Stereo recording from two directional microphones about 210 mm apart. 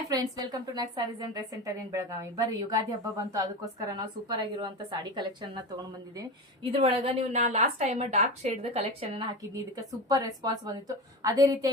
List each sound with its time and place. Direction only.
0.1 s a woman's voice: 15° right (ahead or behind)
9.7 s a woman's voice: 20° right (ahead or behind)